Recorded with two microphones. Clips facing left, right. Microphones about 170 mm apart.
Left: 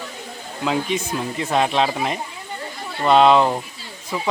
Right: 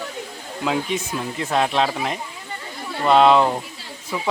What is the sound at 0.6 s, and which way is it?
Speech, centre (ahead or behind).